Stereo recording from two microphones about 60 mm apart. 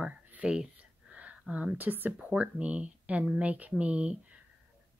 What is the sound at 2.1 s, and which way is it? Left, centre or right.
Speech, centre.